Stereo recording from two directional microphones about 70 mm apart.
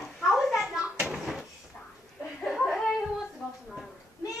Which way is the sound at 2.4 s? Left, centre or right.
Centre.